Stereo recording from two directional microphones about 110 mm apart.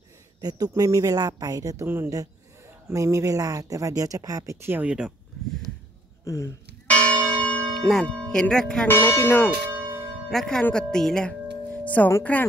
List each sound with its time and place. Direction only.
0.4 s speech: 35° right (ahead or behind)
1.9 s speech: 20° right (ahead or behind)
6.2 s speech: 30° left (ahead or behind)
6.9 s church bell: 10° left (ahead or behind)
8.8 s speech: 20° left (ahead or behind)
10.3 s speech: 5° left (ahead or behind)